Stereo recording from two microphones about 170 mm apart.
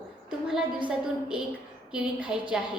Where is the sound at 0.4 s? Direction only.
5° right (ahead or behind).